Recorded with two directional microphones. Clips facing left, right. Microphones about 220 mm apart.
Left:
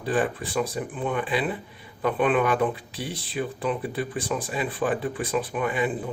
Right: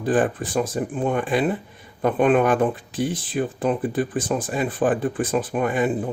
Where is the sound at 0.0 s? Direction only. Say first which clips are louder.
Right 5 dB; 50° right (ahead or behind).